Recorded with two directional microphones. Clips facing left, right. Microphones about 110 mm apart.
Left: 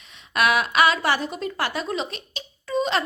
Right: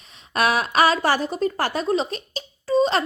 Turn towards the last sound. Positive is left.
turn(degrees=-35)  # may be behind; listen again after turning